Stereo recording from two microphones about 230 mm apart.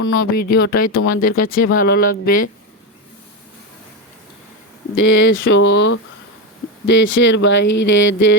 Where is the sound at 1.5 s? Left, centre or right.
Left.